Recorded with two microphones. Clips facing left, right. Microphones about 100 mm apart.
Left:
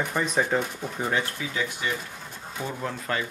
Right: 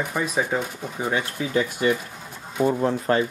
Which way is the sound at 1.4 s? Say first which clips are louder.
Right 7 dB; 45° right (ahead or behind).